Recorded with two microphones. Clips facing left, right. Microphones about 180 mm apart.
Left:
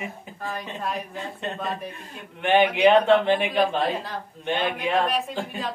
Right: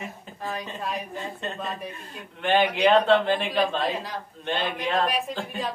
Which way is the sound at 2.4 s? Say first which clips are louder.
Left 3 dB; 15° left (ahead or behind).